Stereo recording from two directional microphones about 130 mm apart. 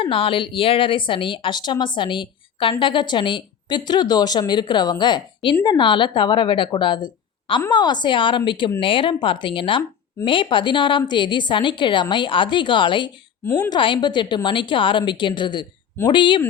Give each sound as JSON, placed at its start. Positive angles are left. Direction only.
{"t": 0.0, "sound": "a woman's voice", "side_deg": 45}
{"t": 13.4, "sound": "a woman's voice", "side_deg": 25}
{"t": 13.7, "sound": "a woman's voice", "side_deg": 40}